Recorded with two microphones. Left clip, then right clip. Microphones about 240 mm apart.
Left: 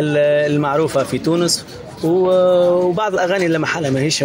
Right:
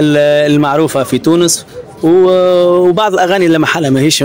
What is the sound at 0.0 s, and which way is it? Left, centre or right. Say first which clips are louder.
Speech: right 6 dB; right.